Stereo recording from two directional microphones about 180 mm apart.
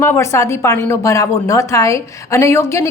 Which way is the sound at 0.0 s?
15° left (ahead or behind).